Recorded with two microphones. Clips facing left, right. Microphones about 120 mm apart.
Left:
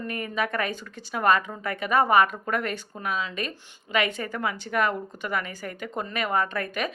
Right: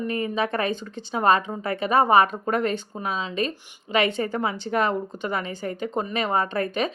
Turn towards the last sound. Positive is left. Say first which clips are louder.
# right 4 dB
turn(degrees=-25)  # may be behind; listen again after turning